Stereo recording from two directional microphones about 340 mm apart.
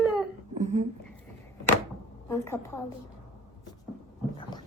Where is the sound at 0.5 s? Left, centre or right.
Right.